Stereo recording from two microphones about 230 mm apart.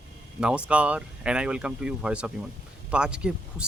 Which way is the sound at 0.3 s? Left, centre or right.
Centre.